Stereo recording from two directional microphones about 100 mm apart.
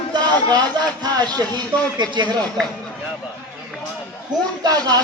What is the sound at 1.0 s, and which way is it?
A man's voice, 40° right (ahead or behind).